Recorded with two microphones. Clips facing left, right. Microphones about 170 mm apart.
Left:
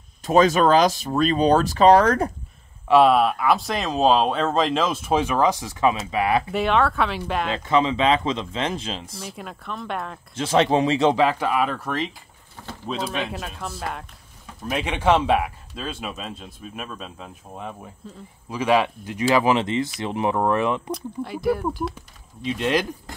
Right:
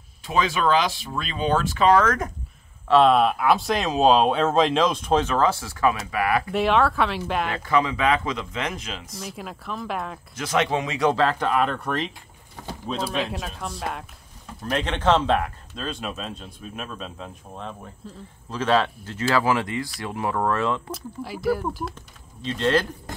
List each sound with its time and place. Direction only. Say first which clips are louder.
0.2 s speech: left 6 dB; 45° left (ahead or behind)
2.9 s speech: left 1 dB; 5° left (ahead or behind); by 6.4 s 25° left (ahead or behind)
6.5 s speech: even; centre (ahead or behind)
7.4 s speech: left 4 dB; 25° left (ahead or behind)
9.2 s speech: even; centre (ahead or behind)
10.3 s speech: left 5 dB; 30° left (ahead or behind); by 18.2 s centre (ahead or behind)
18.5 s speech: left 2 dB; 10° left (ahead or behind)
20.9 s speech: left 4 dB; centre (ahead or behind)
22.4 s speech: even; 15° left (ahead or behind)